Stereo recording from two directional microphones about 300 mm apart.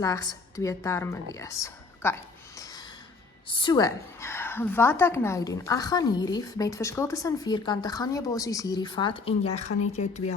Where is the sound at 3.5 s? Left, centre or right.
Centre.